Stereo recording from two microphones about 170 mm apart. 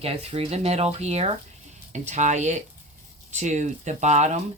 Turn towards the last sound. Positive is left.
turn(degrees=-40)  # may be behind; listen again after turning